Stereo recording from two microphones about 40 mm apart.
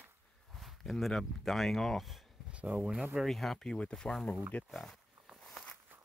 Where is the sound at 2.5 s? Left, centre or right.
Right.